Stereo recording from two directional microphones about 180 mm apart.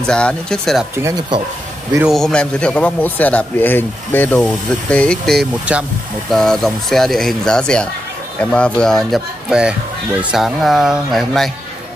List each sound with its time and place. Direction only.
0.0 s a man's voice: 5° left (ahead or behind)
0.9 s speech: 20° right (ahead or behind)
2.0 s a man's voice: centre (ahead or behind)